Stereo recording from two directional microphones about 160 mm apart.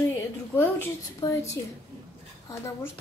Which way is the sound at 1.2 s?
30° left (ahead or behind).